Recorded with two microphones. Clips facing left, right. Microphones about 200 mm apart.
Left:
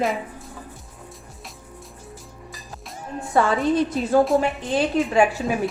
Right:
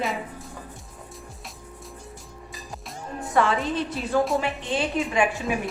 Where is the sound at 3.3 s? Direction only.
35° left (ahead or behind).